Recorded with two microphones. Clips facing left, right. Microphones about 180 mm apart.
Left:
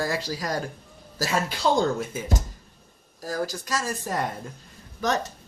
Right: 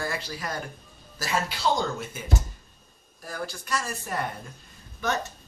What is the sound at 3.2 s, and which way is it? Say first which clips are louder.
A man's voice: left 6 dB; 35° left (ahead or behind).